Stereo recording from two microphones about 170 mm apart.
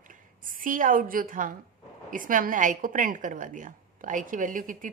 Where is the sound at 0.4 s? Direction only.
50° right (ahead or behind).